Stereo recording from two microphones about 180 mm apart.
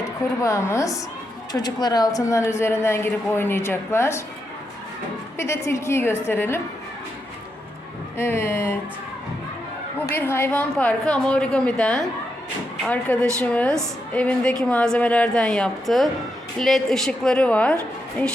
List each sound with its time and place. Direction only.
0.4 s a woman's voice: 15° left (ahead or behind)
5.4 s a woman's voice: 15° left (ahead or behind)
8.2 s a woman's voice: 15° left (ahead or behind)
10.2 s a woman's voice: 15° left (ahead or behind)